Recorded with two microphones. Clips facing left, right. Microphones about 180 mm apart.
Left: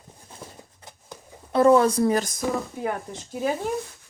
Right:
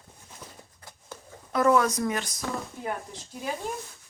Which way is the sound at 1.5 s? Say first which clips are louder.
Left 5 dB; 30° left (ahead or behind).